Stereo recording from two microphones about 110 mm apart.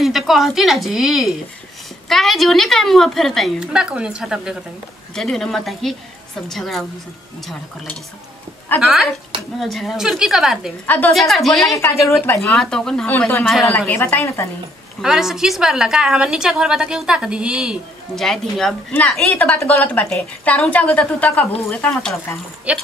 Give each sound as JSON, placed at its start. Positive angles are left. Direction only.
{"t": 0.0, "sound": "a woman's voice", "side_deg": 0}
{"t": 3.5, "sound": "a woman's voice", "side_deg": -10}
{"t": 8.8, "sound": "a woman's voice", "side_deg": 0}
{"t": 15.0, "sound": "a woman's voice", "side_deg": -5}
{"t": 22.7, "sound": "a woman's voice", "side_deg": -10}